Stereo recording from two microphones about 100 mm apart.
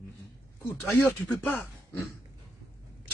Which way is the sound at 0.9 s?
20° left (ahead or behind).